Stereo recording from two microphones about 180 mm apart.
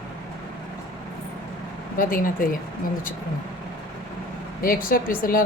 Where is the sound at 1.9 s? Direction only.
50° left (ahead or behind).